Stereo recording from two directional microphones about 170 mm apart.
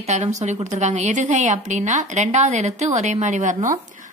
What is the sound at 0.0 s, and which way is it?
A woman's voice, 40° right (ahead or behind).